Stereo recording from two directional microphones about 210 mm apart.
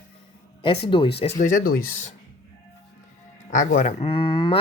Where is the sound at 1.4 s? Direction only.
40° left (ahead or behind).